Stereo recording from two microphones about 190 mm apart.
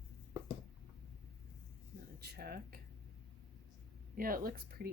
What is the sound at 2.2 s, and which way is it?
Speech, 55° right (ahead or behind).